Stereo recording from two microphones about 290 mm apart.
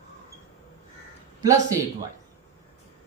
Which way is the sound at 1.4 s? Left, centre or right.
Centre.